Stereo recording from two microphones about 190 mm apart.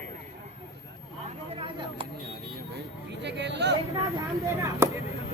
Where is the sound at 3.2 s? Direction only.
65° right (ahead or behind).